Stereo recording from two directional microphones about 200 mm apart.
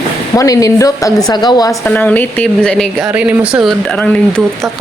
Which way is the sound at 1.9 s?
10° left (ahead or behind).